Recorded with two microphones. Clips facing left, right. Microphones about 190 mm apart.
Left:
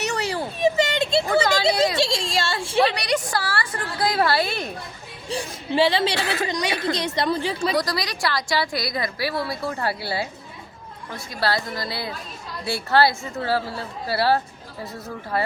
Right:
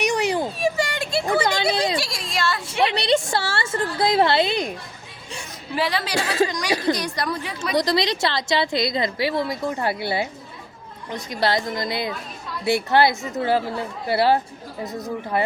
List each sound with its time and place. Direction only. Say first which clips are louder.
0.0 s children playing: right 4 dB; 15° right (ahead or behind)
0.6 s a sound: left 3 dB; 20° left (ahead or behind)
2.9 s a woman's voice: right 4 dB; 25° right (ahead or behind)
5.3 s a woman's voice: left 6 dB; 30° left (ahead or behind)
7.8 s a woman's voice: right 4 dB; 25° right (ahead or behind)